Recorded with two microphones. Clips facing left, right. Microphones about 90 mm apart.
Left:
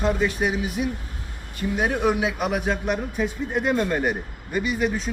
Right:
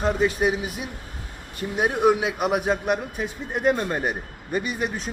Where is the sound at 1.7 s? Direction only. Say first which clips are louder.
Right 3 dB; 15° right (ahead or behind).